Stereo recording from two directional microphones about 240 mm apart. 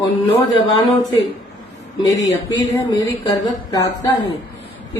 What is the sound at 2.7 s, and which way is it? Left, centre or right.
Speech, centre.